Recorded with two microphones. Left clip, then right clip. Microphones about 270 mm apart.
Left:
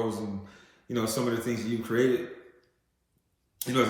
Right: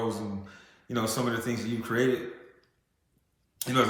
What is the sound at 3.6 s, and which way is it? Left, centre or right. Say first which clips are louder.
Speech: right 1 dB; centre.